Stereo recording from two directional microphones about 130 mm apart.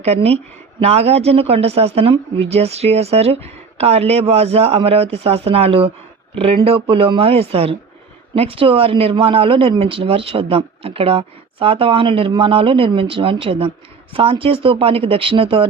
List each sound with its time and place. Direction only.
0.1 s a woman's voice: 55° right (ahead or behind)